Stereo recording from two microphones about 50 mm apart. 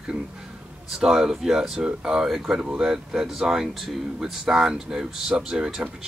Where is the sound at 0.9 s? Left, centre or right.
Centre.